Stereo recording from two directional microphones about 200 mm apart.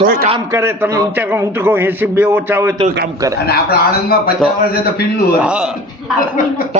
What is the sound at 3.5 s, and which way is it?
Speech, 50° left (ahead or behind).